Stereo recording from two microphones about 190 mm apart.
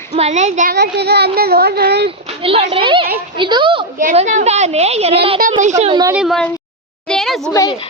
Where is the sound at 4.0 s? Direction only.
40° right (ahead or behind).